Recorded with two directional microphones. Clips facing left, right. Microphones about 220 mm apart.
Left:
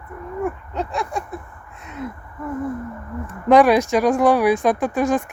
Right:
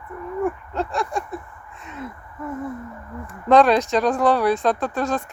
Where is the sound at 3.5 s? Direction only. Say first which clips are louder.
Left 2 dB; 10° left (ahead or behind).